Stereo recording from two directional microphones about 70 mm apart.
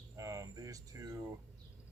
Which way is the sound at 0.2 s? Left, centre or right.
Right.